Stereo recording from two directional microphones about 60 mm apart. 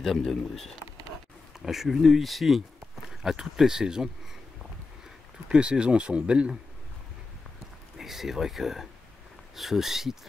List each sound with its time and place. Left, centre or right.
0.0 s speech: centre
5.5 s speech: centre
8.0 s speech: centre